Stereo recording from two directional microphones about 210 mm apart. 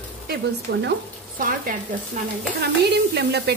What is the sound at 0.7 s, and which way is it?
Speech, 55° right (ahead or behind).